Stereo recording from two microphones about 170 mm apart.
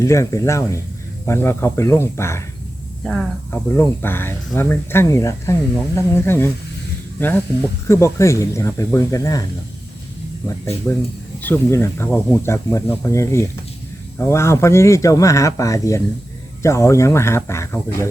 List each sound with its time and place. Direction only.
0.0 s speech: 15° left (ahead or behind)
3.0 s speech: centre (ahead or behind)
3.5 s speech: 15° left (ahead or behind)
10.4 s speech: 15° left (ahead or behind)